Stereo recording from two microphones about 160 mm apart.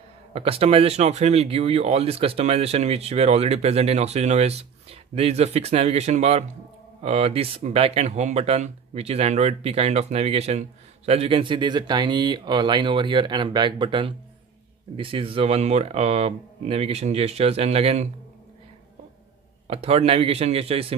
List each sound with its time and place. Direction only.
0.3 s speech: 35° right (ahead or behind)
19.7 s speech: 40° right (ahead or behind)